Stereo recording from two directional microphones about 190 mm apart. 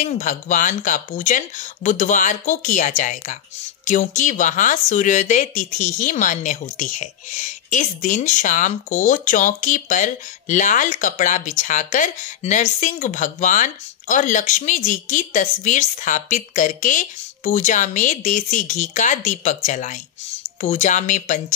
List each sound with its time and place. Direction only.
0.0 s speech: 45° left (ahead or behind)